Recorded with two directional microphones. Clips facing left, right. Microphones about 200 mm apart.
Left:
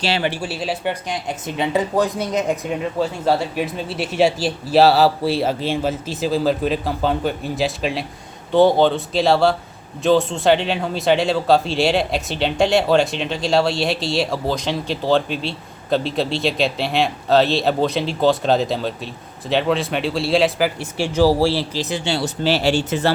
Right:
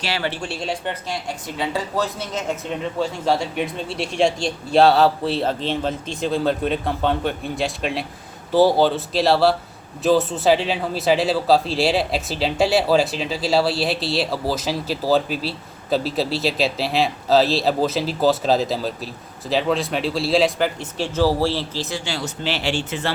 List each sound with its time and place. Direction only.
0.0 s speech: 25° left (ahead or behind)
0.3 s a man's voice: 5° left (ahead or behind)
1.0 s a man's voice: 20° left (ahead or behind); by 23.1 s 40° left (ahead or behind)